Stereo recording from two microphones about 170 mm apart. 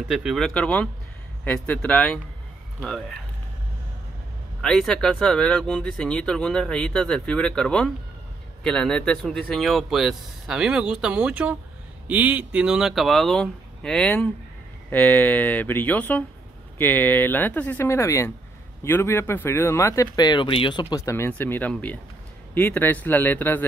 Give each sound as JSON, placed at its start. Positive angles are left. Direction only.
{"t": 0.1, "sound": "speech", "side_deg": 0}
{"t": 4.6, "sound": "speech", "side_deg": 5}